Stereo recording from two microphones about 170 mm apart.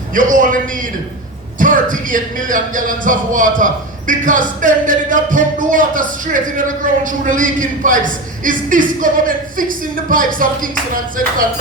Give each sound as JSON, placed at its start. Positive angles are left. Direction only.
{"t": 0.1, "sound": "a man's voice", "side_deg": -50}